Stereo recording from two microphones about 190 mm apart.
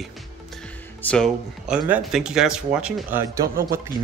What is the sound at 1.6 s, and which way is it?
Speech, 5° right (ahead or behind).